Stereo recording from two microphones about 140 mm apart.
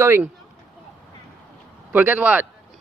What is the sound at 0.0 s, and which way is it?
Speech, 20° right (ahead or behind).